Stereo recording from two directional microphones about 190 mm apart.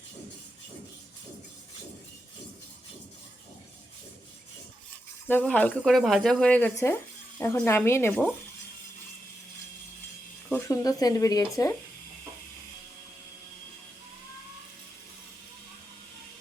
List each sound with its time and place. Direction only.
5.3 s speech: 10° left (ahead or behind)
10.5 s speech: 20° left (ahead or behind)